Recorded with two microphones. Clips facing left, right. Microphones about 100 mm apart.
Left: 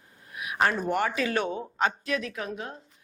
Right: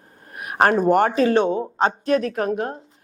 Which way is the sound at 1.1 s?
35° right (ahead or behind).